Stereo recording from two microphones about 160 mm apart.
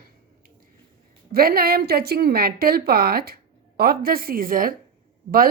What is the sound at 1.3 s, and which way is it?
A woman's voice, 70° right (ahead or behind).